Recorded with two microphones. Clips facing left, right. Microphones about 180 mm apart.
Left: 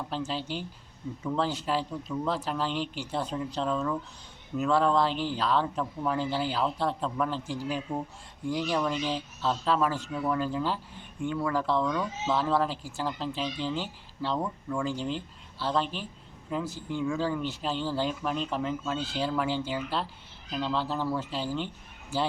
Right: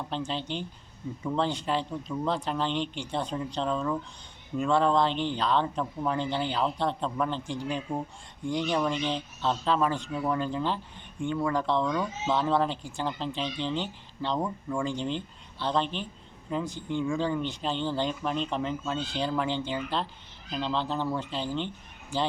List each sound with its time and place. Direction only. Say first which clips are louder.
0.1 s speech: right 1 dB; 5° left (ahead or behind)